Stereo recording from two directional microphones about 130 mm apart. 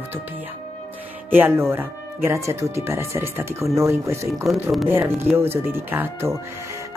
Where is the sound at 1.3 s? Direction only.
15° right (ahead or behind).